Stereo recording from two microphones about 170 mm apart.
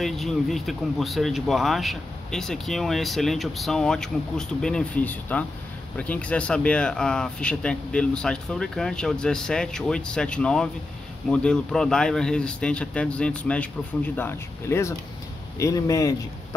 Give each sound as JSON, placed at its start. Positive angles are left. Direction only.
{"t": 0.0, "sound": "speech", "side_deg": 0}